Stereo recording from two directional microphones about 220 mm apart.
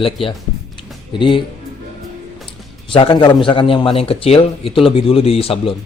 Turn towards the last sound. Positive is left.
turn(degrees=25)  # may be behind; listen again after turning